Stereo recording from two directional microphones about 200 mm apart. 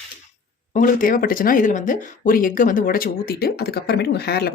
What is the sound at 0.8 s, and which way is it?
Speech, 40° left (ahead or behind).